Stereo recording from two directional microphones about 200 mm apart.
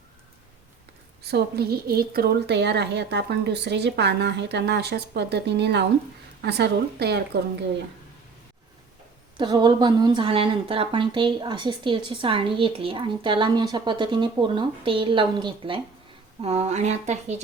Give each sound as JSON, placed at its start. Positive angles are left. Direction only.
{"t": 1.2, "sound": "a woman's voice", "side_deg": -55}
{"t": 9.4, "sound": "a woman's voice", "side_deg": -20}